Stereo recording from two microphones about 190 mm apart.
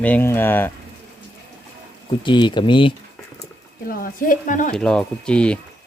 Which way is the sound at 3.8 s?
50° left (ahead or behind).